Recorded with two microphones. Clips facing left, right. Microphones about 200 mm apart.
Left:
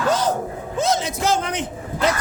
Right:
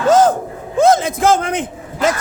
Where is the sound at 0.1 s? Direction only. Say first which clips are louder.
Right 10 dB; 50° right (ahead or behind).